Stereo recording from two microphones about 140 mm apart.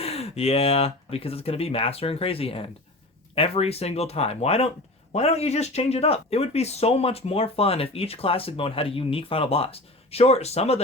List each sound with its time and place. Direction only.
0.0 s speech: 45° left (ahead or behind)